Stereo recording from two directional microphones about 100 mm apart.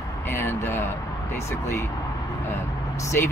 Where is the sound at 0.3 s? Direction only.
20° left (ahead or behind).